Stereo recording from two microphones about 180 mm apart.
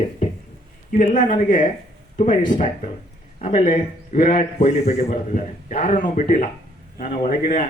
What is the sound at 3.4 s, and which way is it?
Speech, 45° left (ahead or behind).